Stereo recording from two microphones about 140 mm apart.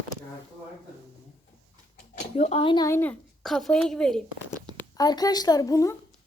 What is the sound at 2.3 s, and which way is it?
Speech, 45° left (ahead or behind).